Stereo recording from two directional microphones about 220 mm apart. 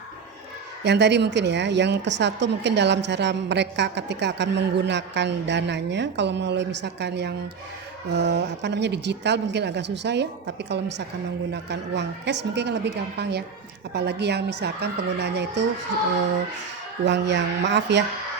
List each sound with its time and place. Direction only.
0.9 s a woman's voice: 50° right (ahead or behind)
17.1 s a woman's voice: 55° right (ahead or behind)